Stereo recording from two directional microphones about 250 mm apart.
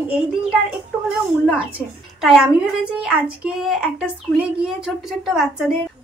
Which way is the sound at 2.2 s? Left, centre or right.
Centre.